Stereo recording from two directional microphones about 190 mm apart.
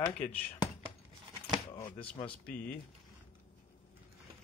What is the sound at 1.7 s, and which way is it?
Speech, 20° left (ahead or behind).